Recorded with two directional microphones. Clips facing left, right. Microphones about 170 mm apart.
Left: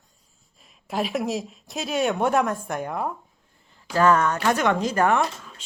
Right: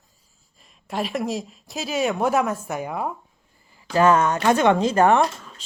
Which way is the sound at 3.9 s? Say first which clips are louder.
Right 2 dB; 20° right (ahead or behind).